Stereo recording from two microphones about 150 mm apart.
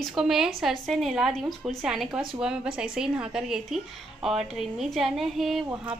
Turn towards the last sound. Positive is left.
turn(degrees=-5)  # may be behind; listen again after turning